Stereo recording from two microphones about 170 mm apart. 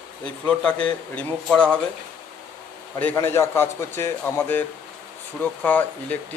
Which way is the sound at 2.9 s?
10° left (ahead or behind).